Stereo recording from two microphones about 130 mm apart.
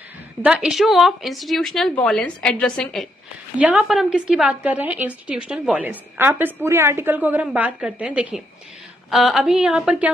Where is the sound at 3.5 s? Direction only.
5° right (ahead or behind).